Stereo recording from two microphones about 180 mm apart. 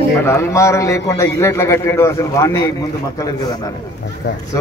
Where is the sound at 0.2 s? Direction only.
15° left (ahead or behind).